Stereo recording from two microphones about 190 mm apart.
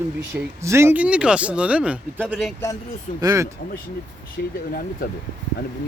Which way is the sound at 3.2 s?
15° right (ahead or behind).